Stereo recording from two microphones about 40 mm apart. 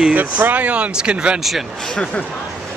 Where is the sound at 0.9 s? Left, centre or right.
Right.